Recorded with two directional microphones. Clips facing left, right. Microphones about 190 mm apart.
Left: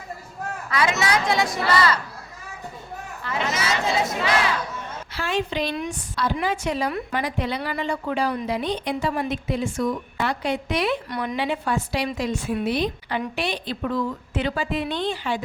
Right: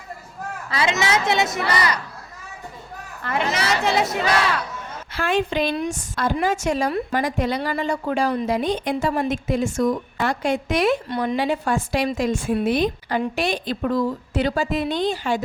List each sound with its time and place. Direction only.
0.7 s a woman's voice: 25° right (ahead or behind)
3.2 s a woman's voice: 60° right (ahead or behind)
5.1 s a woman's voice: 50° right (ahead or behind)
5.7 s a woman's voice: 35° right (ahead or behind)
11.1 s a woman's voice: 25° right (ahead or behind)
11.3 s a woman's voice: 40° right (ahead or behind)